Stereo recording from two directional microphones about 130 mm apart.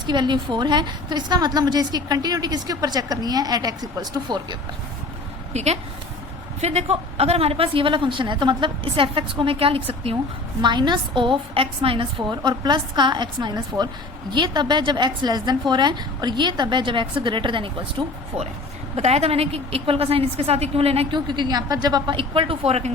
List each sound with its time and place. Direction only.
0.0 s a woman's voice: 35° right (ahead or behind)
5.5 s a woman's voice: 55° right (ahead or behind)
10.6 s a woman's voice: 35° right (ahead or behind)
18.9 s a woman's voice: 55° right (ahead or behind)
21.2 s a woman's voice: 35° right (ahead or behind); by 22.9 s 50° right (ahead or behind)